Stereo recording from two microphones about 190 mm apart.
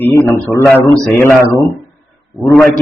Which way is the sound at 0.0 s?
15° left (ahead or behind).